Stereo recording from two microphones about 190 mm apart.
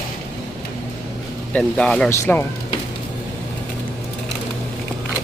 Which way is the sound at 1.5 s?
5° left (ahead or behind).